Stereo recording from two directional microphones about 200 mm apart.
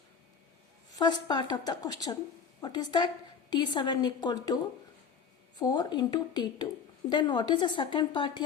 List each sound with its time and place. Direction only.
0.9 s a woman's voice: 20° left (ahead or behind)